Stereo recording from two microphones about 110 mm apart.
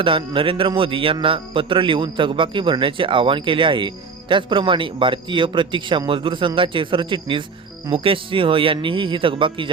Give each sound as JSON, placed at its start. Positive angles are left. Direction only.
{"t": 0.0, "sound": "a man's voice", "side_deg": -50}